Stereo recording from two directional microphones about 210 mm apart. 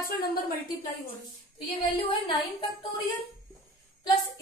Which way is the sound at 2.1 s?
20° left (ahead or behind).